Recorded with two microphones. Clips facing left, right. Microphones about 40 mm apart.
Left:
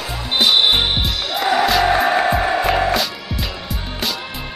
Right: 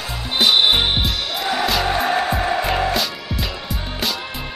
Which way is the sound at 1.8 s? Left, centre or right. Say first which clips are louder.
Left 4 dB; centre.